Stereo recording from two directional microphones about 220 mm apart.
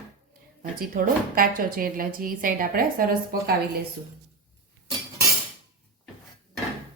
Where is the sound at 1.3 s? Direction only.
40° right (ahead or behind).